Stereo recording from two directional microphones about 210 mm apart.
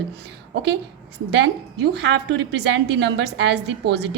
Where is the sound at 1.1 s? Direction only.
55° right (ahead or behind).